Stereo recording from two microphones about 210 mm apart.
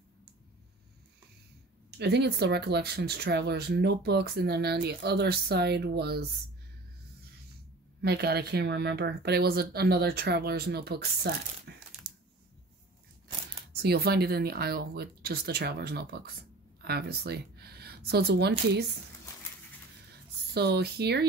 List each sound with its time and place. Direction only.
1.9 s speech: 50° right (ahead or behind)
8.0 s speech: 50° right (ahead or behind)
11.7 s a sound: 55° right (ahead or behind)
12.1 s a sound: 5° right (ahead or behind)
13.8 s speech: 50° right (ahead or behind)
20.5 s speech: 50° right (ahead or behind)